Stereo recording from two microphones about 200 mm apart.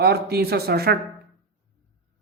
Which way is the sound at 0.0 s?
50° right (ahead or behind).